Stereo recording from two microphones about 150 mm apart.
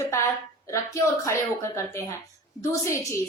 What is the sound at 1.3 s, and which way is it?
A woman's voice, 20° left (ahead or behind).